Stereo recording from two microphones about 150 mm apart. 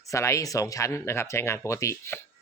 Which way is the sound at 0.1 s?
20° left (ahead or behind).